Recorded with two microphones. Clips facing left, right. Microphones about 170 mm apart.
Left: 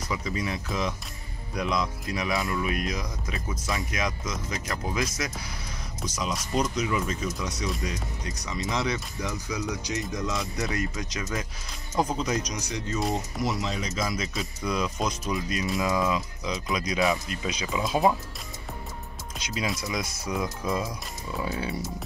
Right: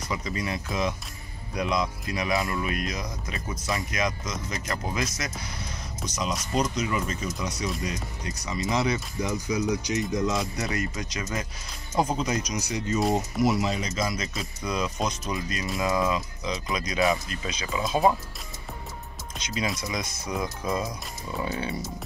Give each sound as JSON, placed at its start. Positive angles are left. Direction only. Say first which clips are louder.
{"t": 0.1, "sound": "speech", "louder": "even", "side_deg": 0}
{"t": 9.2, "sound": "speech", "louder": "right 8 dB", "side_deg": -20}
{"t": 10.3, "sound": "speech", "louder": "right 1 dB", "side_deg": 0}
{"t": 19.3, "sound": "speech", "louder": "right 1 dB", "side_deg": 5}